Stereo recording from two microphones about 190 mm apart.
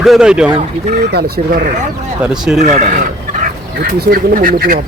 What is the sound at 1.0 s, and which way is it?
Speech, 60° right (ahead or behind).